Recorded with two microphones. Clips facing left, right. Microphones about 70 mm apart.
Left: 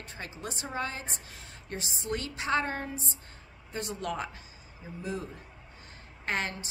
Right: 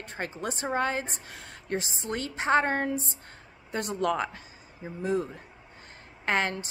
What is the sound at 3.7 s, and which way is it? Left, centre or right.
Speech, right.